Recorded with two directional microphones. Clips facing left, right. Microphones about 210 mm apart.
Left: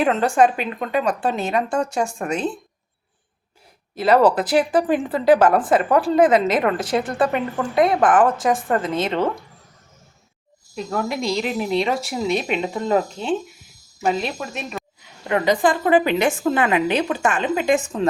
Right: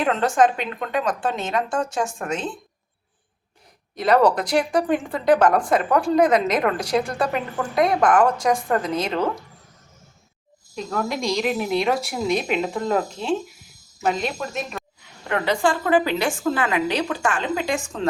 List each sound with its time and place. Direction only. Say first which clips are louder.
0.0 s a woman's voice: left 2 dB; 5° left (ahead or behind)
3.9 s speech: left 2 dB; 5° left (ahead or behind)
10.9 s speech: left 1 dB; 5° left (ahead or behind)
15.3 s a woman's voice: left 3 dB; 15° left (ahead or behind)